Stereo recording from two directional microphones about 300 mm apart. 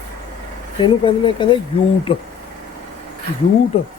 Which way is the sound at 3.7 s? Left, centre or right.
Centre.